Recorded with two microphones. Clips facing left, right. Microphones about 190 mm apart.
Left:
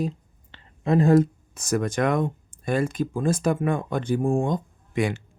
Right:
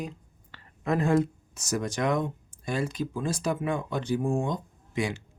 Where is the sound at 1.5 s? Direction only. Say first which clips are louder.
Left 5 dB; 55° left (ahead or behind).